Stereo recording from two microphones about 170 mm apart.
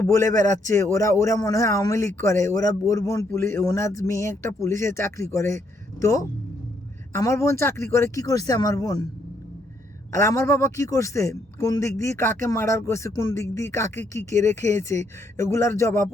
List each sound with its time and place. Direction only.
0.0 s a man's voice: 20° left (ahead or behind)
10.1 s a man's voice: 15° left (ahead or behind)